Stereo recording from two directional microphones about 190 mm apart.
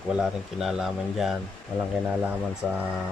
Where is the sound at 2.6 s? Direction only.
Centre (ahead or behind).